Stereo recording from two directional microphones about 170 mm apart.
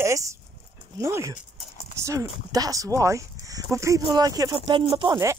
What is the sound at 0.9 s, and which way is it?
Speech, 15° right (ahead or behind).